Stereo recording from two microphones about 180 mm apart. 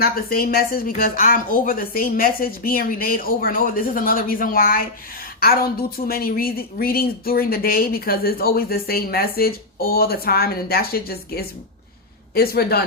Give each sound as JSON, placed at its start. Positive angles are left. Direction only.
{"t": 0.0, "sound": "speech", "side_deg": 55}
{"t": 6.1, "sound": "speech", "side_deg": 55}